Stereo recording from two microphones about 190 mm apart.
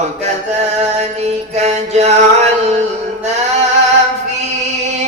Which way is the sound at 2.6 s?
35° right (ahead or behind).